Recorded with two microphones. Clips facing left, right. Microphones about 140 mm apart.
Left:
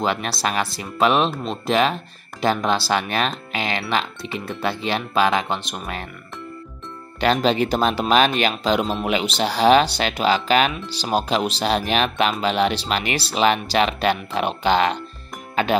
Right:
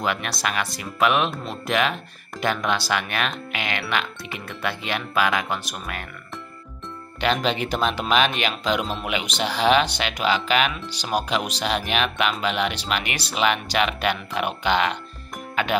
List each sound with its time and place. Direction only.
0.0 s speech: 30° left (ahead or behind)
7.2 s speech: 40° left (ahead or behind)